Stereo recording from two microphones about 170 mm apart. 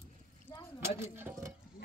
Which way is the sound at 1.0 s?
15° right (ahead or behind).